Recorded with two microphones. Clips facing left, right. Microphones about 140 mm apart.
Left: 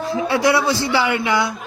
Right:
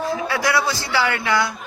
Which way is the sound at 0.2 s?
25° left (ahead or behind).